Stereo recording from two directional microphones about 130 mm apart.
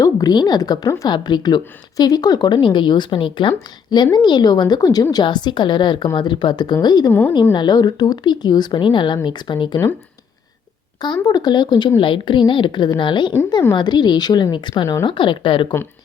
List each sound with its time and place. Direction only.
0.0 s a woman's voice: 30° left (ahead or behind)
7.1 s a woman's voice: 15° left (ahead or behind)
7.5 s a woman's voice: 35° left (ahead or behind)
11.0 s a woman's voice: 35° left (ahead or behind)